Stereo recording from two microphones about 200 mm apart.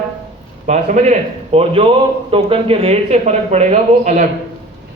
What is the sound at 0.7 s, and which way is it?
Speech, 35° right (ahead or behind).